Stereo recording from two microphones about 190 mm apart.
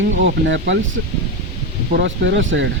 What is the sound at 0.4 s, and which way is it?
Speech, 75° right (ahead or behind).